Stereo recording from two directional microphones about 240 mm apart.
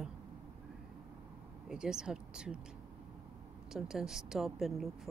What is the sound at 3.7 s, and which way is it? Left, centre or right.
A woman's voice, centre.